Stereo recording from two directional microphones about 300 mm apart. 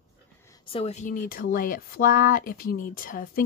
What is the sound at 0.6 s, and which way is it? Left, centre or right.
Speech, centre.